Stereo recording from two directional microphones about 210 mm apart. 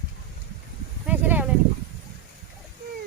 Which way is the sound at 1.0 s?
10° right (ahead or behind).